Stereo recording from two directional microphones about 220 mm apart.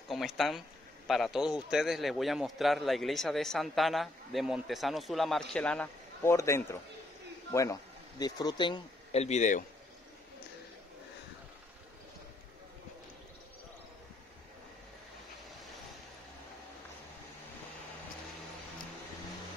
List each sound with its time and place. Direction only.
0.1 s a man's voice: centre (ahead or behind); by 9.7 s 35° left (ahead or behind)